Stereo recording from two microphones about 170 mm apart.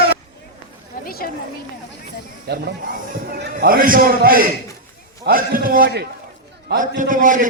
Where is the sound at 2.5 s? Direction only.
65° right (ahead or behind).